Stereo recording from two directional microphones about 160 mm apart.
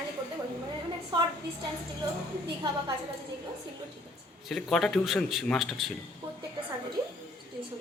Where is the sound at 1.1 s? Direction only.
30° right (ahead or behind).